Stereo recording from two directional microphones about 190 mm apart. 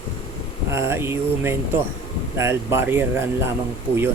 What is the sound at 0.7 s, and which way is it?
Speech, 15° right (ahead or behind).